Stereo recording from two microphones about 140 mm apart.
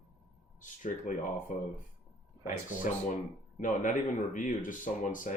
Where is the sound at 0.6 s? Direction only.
65° left (ahead or behind).